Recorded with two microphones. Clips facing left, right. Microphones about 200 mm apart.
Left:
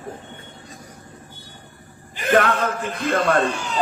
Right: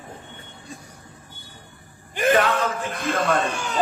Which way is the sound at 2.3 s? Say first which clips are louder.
Left 1 dB; 55° left (ahead or behind).